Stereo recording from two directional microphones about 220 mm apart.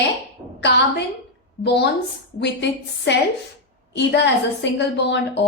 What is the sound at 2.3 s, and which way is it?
A woman's voice, 50° left (ahead or behind).